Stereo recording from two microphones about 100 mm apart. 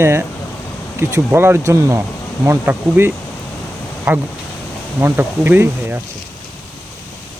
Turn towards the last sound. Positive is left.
turn(degrees=-20)  # may be behind; listen again after turning